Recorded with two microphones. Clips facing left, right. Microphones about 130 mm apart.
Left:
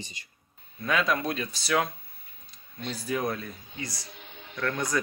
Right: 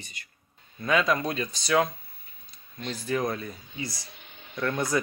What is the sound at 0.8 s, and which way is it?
Speech, centre (ahead or behind).